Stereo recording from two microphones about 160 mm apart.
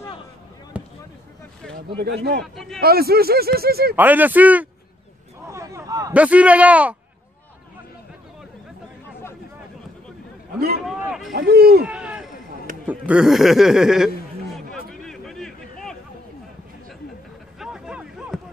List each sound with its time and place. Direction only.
0.7 s fireworks: 10° right (ahead or behind)
2.0 s speech: 75° right (ahead or behind)
2.4 s speech: centre (ahead or behind)
2.8 s speech: 75° right (ahead or behind)
3.9 s a man's voice: 10° right (ahead or behind)
5.5 s a sound: 20° right (ahead or behind)
6.1 s a man's voice: 10° right (ahead or behind)
10.9 s speech: centre (ahead or behind)
11.3 s speech: 75° right (ahead or behind)
11.8 s a sound: 5° right (ahead or behind)
17.6 s a sound: 5° right (ahead or behind)